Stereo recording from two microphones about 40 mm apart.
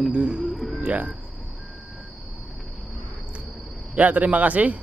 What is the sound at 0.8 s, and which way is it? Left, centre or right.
Speech, right.